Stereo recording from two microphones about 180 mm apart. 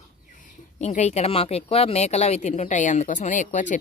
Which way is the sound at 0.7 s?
40° left (ahead or behind).